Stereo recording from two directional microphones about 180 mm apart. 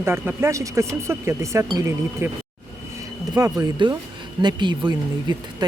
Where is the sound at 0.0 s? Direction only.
15° right (ahead or behind).